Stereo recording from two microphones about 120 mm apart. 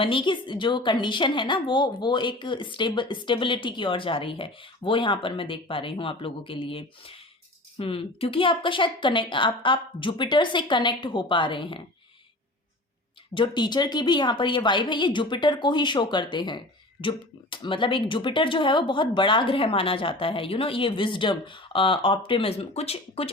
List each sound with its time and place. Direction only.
0.0 s a woman's voice: 45° left (ahead or behind)
13.3 s a woman's voice: 40° left (ahead or behind)